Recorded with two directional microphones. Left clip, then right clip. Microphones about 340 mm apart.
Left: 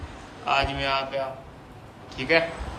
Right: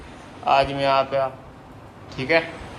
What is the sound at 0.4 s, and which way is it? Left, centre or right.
A man's voice, centre.